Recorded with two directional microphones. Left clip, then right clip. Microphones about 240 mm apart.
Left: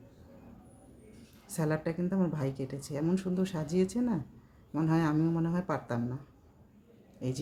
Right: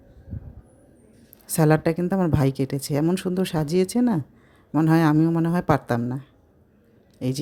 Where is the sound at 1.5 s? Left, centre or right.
Right.